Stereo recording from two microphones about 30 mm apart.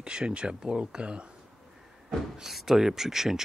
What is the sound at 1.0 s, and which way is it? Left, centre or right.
Speech, right.